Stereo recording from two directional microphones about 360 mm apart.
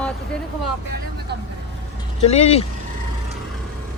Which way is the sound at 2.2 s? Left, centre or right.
Centre.